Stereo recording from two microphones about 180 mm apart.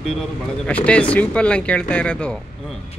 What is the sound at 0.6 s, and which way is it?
Speech, 5° left (ahead or behind).